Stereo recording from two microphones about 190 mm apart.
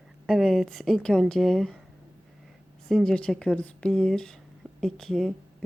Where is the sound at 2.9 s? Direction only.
5° left (ahead or behind).